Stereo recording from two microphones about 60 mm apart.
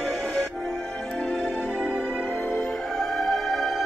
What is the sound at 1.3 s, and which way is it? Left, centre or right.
Music, centre.